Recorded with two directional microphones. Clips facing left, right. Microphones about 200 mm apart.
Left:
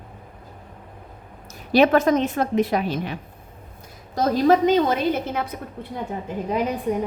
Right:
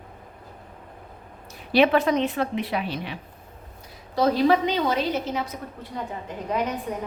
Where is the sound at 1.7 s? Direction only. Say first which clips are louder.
Left 3 dB; 45° left (ahead or behind).